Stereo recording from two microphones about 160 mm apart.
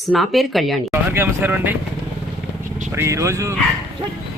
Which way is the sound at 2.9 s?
15° right (ahead or behind).